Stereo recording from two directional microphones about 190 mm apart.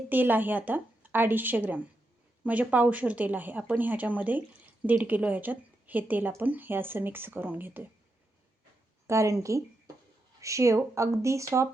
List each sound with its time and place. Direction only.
0.1 s a woman's voice: 10° right (ahead or behind)
9.0 s a woman's voice: 15° right (ahead or behind)